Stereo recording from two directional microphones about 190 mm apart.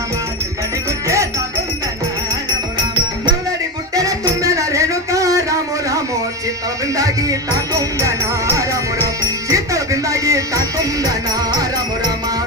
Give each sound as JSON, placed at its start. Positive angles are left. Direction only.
{"t": 1.0, "sound": "music", "side_deg": -15}
{"t": 3.9, "sound": "music", "side_deg": -20}